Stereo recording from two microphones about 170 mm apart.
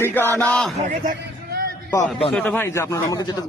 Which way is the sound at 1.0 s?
55° right (ahead or behind).